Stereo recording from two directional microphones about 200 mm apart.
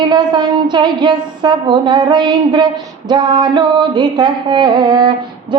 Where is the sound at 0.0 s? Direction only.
20° right (ahead or behind).